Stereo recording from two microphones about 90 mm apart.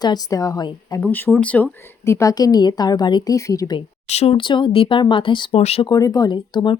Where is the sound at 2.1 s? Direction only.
35° left (ahead or behind).